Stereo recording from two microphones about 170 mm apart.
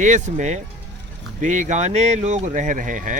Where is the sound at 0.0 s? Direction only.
45° right (ahead or behind).